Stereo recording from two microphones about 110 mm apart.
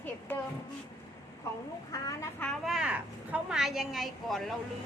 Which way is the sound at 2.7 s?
5° right (ahead or behind).